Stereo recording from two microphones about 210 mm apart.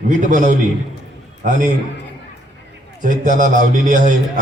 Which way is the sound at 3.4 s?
40° right (ahead or behind).